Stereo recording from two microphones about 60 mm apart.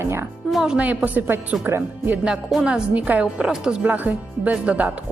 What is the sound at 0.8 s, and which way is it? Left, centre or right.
A woman's voice, right.